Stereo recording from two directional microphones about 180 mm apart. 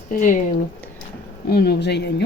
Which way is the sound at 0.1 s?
45° left (ahead or behind).